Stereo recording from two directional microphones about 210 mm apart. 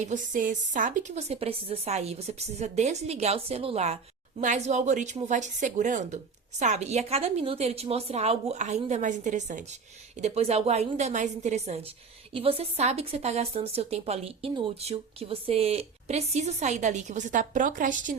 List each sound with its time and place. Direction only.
0.0 s speech: 35° right (ahead or behind)